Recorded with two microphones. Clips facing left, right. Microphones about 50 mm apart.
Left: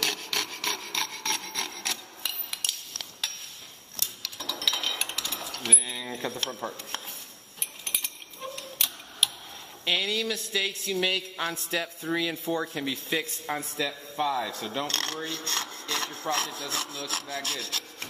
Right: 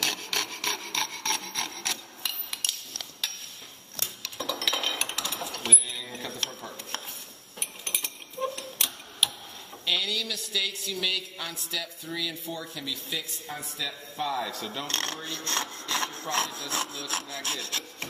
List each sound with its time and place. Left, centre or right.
0.0 s wood: centre
4.2 s dishes: centre
4.9 s a sound: centre
5.7 s a sound: centre
6.6 s a sound: left
7.8 s clock: centre
9.8 s a woman's voice: left
13.7 s a man's voice: centre
14.2 s speech: centre
14.9 s rub: centre
15.1 s rub: centre